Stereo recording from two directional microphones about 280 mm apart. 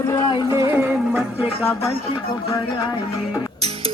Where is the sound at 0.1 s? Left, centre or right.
Centre.